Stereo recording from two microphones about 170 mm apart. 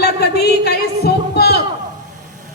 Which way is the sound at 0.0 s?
70° left (ahead or behind).